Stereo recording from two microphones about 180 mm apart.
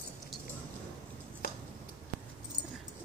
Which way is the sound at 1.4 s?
55° left (ahead or behind).